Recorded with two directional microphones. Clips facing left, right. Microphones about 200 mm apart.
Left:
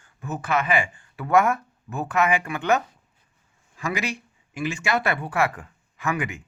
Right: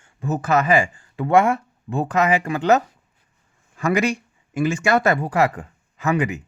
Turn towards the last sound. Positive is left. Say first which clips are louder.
# right 5 dB
turn(degrees=-35)  # may be behind; listen again after turning